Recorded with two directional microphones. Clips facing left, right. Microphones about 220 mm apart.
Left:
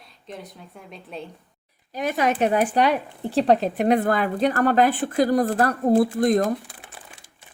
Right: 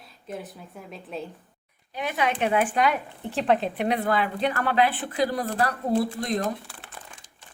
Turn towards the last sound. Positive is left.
turn(degrees=45)  # may be behind; listen again after turning